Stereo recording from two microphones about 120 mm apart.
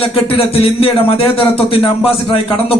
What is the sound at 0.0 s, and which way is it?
A man's voice, 50° left (ahead or behind).